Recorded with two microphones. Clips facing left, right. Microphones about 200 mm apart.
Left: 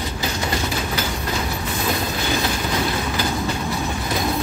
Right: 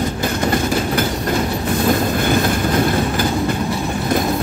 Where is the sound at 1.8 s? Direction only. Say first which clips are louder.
Right 7 dB; 55° right (ahead or behind).